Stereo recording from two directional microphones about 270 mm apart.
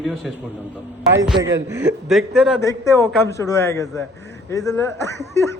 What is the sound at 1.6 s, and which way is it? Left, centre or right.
Speech, centre.